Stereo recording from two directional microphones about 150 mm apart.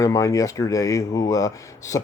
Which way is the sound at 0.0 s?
20° left (ahead or behind).